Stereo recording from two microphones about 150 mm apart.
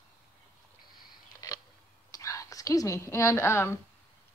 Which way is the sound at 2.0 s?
20° left (ahead or behind).